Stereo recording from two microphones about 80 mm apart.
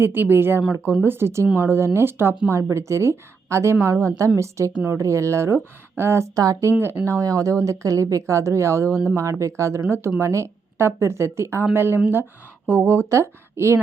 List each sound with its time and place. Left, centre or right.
0.0 s a woman's voice: right
4.7 s speech: right
4.9 s a woman's voice: right
6.4 s speech: right
6.7 s a woman's voice: right